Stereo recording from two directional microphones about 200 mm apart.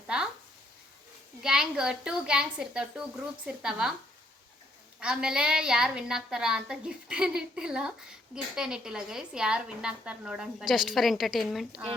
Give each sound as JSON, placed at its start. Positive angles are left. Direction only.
{"t": 1.4, "sound": "a woman's voice", "side_deg": -5}
{"t": 4.9, "sound": "a woman's voice", "side_deg": -5}